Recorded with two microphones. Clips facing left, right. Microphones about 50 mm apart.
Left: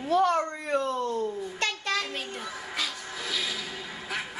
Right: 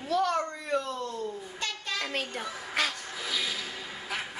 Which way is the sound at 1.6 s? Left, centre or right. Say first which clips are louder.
Left 5 dB; left.